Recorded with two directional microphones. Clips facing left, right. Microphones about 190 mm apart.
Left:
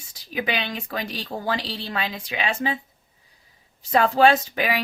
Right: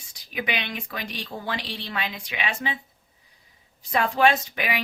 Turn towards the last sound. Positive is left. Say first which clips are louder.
# left 3 dB
turn(degrees=40)  # may be behind; listen again after turning